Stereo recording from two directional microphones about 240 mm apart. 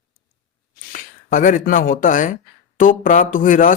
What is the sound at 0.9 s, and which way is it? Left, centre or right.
Speech, left.